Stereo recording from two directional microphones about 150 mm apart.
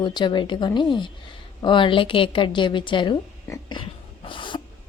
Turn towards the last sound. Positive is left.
turn(degrees=30)  # may be behind; listen again after turning